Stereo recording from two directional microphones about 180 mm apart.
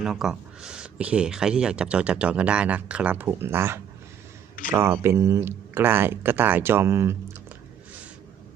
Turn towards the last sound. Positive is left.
turn(degrees=-15)  # may be behind; listen again after turning